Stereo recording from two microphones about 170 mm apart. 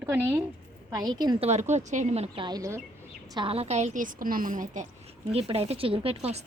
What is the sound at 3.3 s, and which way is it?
A woman's voice, 30° right (ahead or behind).